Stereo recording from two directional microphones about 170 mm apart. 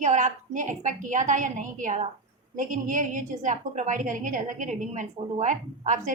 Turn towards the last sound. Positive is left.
turn(degrees=-45)  # may be behind; listen again after turning